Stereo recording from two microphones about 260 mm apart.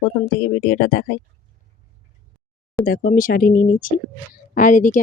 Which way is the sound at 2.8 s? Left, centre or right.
Left.